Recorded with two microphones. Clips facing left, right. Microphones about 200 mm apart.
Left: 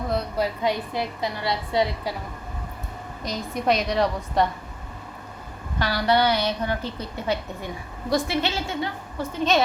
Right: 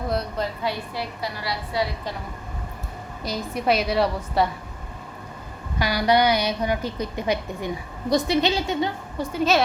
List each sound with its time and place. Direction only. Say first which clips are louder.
0.6 s a woman's voice: left 3 dB; 20° left (ahead or behind)
3.2 s a woman's voice: right 1 dB; 5° right (ahead or behind)
5.8 s a woman's voice: right 2 dB; 15° right (ahead or behind)